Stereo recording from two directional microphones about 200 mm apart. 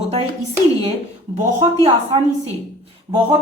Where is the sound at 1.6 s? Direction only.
25° right (ahead or behind).